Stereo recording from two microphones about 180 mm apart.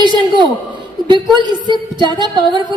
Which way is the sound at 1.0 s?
25° right (ahead or behind).